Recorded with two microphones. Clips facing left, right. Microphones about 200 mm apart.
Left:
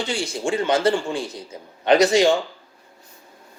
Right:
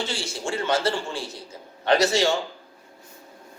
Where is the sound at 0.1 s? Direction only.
15° left (ahead or behind).